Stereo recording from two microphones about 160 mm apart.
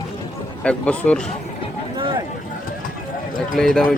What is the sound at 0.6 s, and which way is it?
Speech, 5° left (ahead or behind).